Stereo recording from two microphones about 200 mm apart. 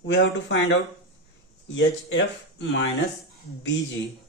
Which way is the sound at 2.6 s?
65° left (ahead or behind).